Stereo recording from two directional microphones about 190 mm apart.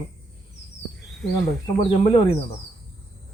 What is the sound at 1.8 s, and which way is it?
Speech, 25° left (ahead or behind).